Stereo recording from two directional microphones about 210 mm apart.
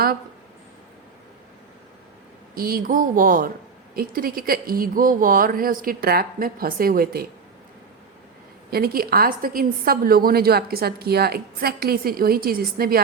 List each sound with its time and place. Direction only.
2.6 s a woman's voice: 45° right (ahead or behind)
8.7 s a woman's voice: 45° right (ahead or behind)